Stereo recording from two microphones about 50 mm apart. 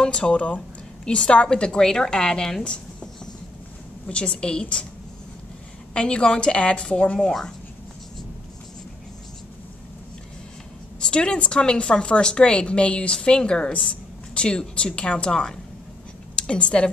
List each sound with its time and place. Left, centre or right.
0.0 s a woman's voice: centre
4.1 s a woman's voice: centre
5.9 s a woman's voice: left
7.2 s a woman's voice: centre
11.0 s a woman's voice: centre